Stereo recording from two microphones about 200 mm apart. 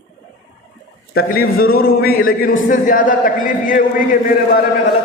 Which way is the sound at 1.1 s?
50° left (ahead or behind).